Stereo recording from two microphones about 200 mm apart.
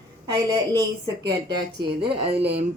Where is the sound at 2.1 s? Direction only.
30° right (ahead or behind).